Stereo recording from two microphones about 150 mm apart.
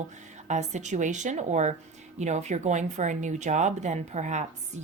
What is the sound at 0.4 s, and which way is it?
Speech, 50° right (ahead or behind).